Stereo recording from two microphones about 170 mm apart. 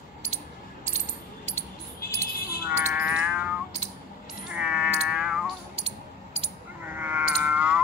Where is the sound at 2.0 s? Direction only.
60° left (ahead or behind).